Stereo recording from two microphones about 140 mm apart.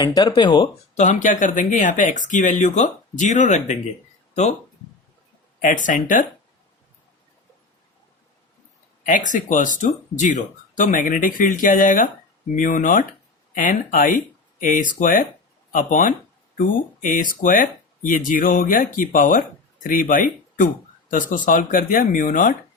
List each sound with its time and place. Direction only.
0.0 s speech: 30° left (ahead or behind)
0.9 s speech: 60° left (ahead or behind)
5.6 s speech: 70° left (ahead or behind)
9.0 s speech: 65° left (ahead or behind)